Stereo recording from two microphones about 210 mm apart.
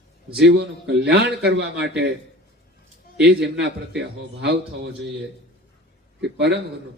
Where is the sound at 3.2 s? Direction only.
50° right (ahead or behind).